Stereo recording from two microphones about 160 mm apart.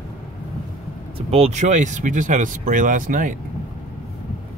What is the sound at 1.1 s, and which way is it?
Speech, 40° right (ahead or behind).